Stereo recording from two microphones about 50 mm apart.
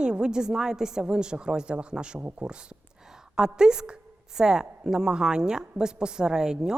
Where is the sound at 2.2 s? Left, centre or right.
Right.